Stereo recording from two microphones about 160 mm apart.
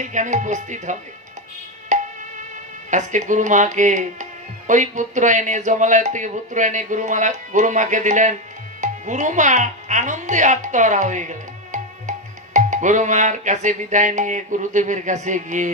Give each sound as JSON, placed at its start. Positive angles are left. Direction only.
{"t": 0.0, "sound": "speech", "side_deg": -50}
{"t": 1.9, "sound": "music", "side_deg": -45}
{"t": 2.9, "sound": "speech", "side_deg": -50}